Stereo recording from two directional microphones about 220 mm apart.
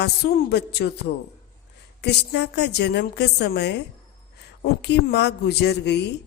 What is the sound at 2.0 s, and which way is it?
A woman's voice, 50° left (ahead or behind).